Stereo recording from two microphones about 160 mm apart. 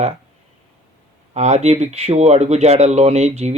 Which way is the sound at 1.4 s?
45° right (ahead or behind).